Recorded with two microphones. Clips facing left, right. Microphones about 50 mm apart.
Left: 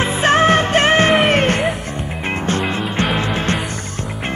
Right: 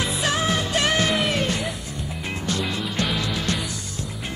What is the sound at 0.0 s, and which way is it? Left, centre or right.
Music, left.